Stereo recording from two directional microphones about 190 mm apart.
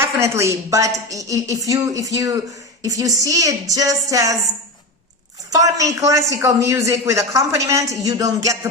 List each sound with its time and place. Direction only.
0.0 s speech: 15° right (ahead or behind)
5.5 s speech: 15° right (ahead or behind)